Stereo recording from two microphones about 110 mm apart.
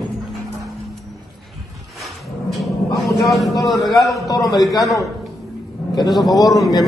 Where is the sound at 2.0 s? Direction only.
Centre (ahead or behind).